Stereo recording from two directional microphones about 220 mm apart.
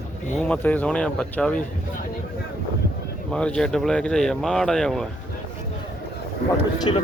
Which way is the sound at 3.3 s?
5° left (ahead or behind).